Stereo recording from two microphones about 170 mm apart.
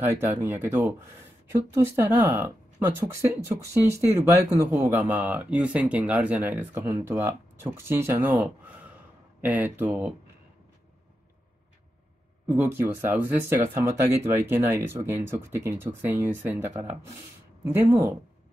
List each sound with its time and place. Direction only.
0.0 s speech: 15° right (ahead or behind)
12.4 s speech: 10° right (ahead or behind)